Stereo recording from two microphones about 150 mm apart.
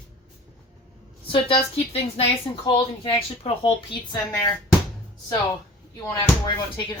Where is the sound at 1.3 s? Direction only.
40° left (ahead or behind).